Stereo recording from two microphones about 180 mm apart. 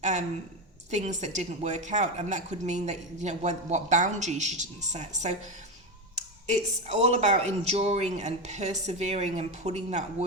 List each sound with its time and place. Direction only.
0.0 s a woman's voice: 40° right (ahead or behind)